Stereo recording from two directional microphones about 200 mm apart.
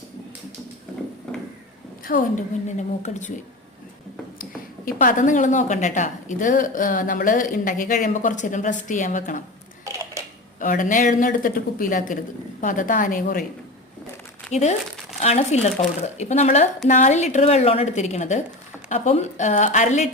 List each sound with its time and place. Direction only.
1.3 s a sound: 5° left (ahead or behind)
2.0 s a woman's voice: 40° left (ahead or behind)
4.9 s a woman's voice: 40° left (ahead or behind)
10.6 s a woman's voice: 40° left (ahead or behind)
14.5 s a woman's voice: 35° left (ahead or behind)